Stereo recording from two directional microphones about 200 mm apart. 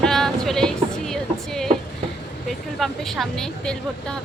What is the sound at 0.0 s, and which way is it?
Music, centre (ahead or behind).